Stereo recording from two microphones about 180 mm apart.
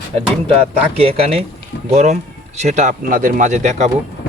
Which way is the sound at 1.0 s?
30° right (ahead or behind).